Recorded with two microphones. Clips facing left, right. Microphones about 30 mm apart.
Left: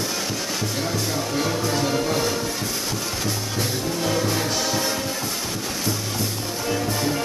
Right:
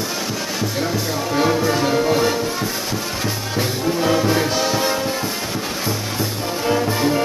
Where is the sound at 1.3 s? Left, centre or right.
Right.